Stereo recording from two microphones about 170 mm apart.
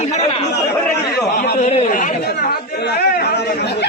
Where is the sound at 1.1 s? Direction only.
65° left (ahead or behind).